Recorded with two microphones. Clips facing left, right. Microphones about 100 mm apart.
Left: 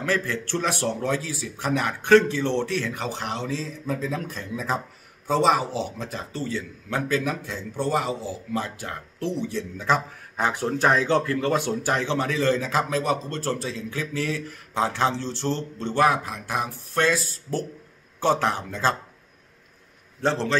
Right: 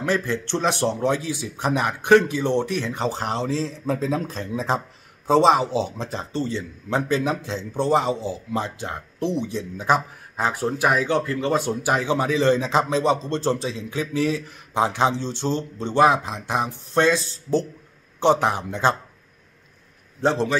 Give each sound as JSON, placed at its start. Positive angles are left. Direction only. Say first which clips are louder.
{"t": 0.0, "sound": "a man's voice", "louder": "right 2 dB", "side_deg": -20}
{"t": 10.7, "sound": "a man's voice", "louder": "left 1 dB", "side_deg": -10}
{"t": 20.2, "sound": "a man's voice", "louder": "right 3 dB", "side_deg": -15}